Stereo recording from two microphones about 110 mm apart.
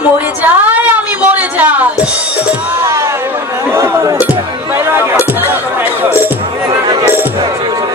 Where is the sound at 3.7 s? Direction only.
25° right (ahead or behind).